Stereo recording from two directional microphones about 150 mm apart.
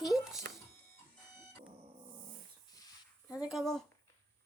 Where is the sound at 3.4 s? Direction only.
Centre (ahead or behind).